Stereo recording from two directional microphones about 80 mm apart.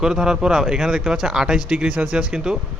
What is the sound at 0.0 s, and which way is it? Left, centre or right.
Speech, centre.